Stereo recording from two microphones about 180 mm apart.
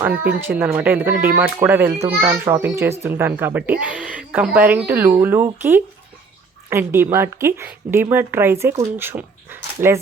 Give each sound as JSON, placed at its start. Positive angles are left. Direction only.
{"t": 0.0, "sound": "speech", "side_deg": -10}